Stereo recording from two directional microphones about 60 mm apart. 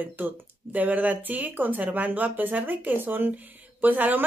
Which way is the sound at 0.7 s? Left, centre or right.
Right.